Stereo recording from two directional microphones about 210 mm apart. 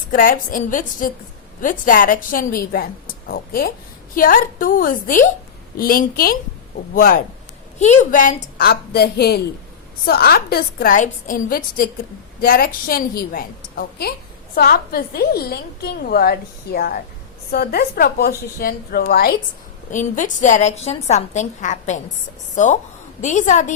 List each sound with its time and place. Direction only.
0.1 s a woman's voice: 40° left (ahead or behind)